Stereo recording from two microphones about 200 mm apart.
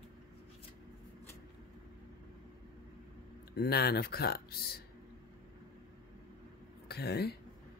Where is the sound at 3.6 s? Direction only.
55° left (ahead or behind).